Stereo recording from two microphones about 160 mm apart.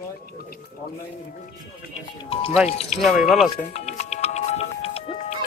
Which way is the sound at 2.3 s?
35° left (ahead or behind).